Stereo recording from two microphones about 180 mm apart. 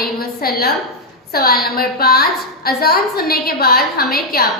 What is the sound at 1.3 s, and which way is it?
A woman's voice, 55° left (ahead or behind).